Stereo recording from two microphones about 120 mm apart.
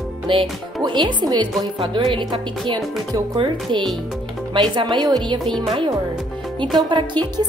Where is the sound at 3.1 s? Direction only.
40° right (ahead or behind).